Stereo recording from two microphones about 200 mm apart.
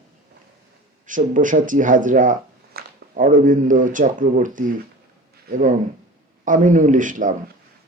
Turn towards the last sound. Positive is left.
turn(degrees=-40)  # may be behind; listen again after turning